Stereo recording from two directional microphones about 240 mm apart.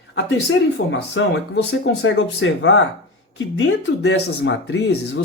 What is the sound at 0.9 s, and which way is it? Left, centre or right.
Speech, left.